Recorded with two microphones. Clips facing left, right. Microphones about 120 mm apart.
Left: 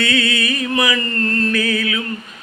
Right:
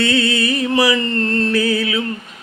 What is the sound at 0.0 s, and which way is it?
Music, 35° right (ahead or behind).